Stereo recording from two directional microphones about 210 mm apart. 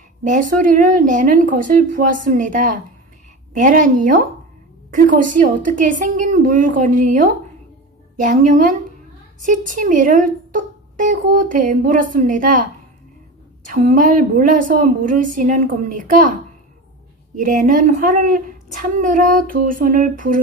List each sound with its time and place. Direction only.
0.2 s a woman's voice: 40° right (ahead or behind)
13.7 s a woman's voice: 40° right (ahead or behind)
17.4 s a woman's voice: 40° right (ahead or behind)